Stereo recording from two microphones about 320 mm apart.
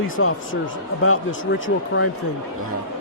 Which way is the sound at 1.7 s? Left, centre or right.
Left.